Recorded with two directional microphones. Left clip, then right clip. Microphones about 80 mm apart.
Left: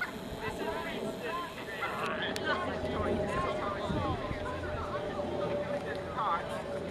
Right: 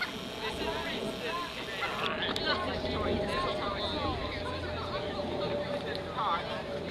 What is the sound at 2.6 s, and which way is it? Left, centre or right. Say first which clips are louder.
Vehicle: right 1 dB; centre.